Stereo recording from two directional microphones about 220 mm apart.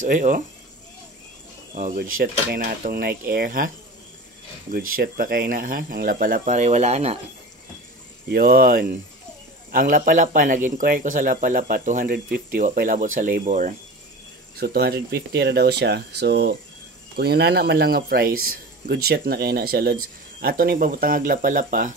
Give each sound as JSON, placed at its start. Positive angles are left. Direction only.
{"t": 0.0, "sound": "speech", "side_deg": -35}
{"t": 1.8, "sound": "speech", "side_deg": -40}
{"t": 4.7, "sound": "speech", "side_deg": -40}
{"t": 8.3, "sound": "speech", "side_deg": -40}
{"t": 14.6, "sound": "speech", "side_deg": -45}